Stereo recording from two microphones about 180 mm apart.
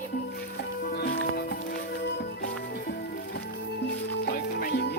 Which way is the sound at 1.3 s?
55° left (ahead or behind).